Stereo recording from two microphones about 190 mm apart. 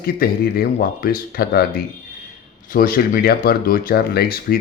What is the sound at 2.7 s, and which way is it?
Speech, 50° left (ahead or behind).